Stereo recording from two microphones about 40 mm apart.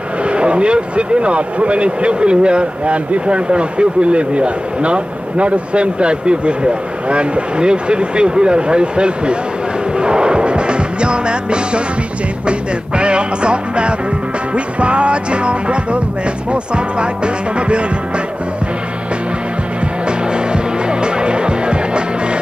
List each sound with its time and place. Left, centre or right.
0.2 s speech: right
9.9 s music: right
12.4 s speech: right
20.1 s music: right